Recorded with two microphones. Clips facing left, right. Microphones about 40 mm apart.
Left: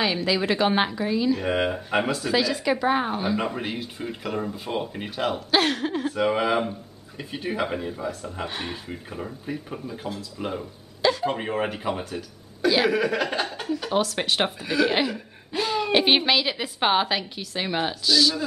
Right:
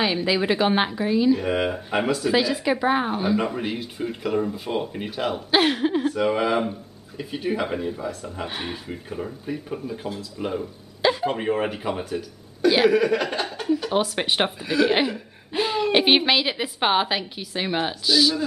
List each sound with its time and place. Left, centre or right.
0.0 s a woman's voice: centre
1.4 s speech: centre
2.3 s speech: centre
5.5 s a woman's voice: centre
6.1 s speech: centre
8.5 s a woman's voice: centre
8.9 s speech: centre
11.0 s speech: centre
11.2 s speech: centre
14.0 s a woman's voice: centre
15.5 s a sound: centre
15.8 s a woman's voice: centre